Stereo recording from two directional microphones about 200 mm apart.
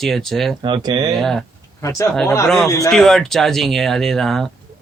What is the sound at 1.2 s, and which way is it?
Speech, centre (ahead or behind).